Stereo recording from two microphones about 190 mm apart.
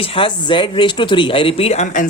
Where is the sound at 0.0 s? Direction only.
30° left (ahead or behind).